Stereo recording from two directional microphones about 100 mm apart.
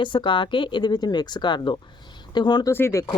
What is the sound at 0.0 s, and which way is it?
A woman's voice, 55° left (ahead or behind).